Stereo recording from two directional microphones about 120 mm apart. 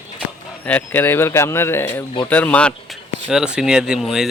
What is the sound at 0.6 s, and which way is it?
Speech, 15° left (ahead or behind).